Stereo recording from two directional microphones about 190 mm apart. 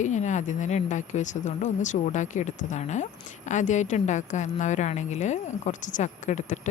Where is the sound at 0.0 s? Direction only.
40° left (ahead or behind).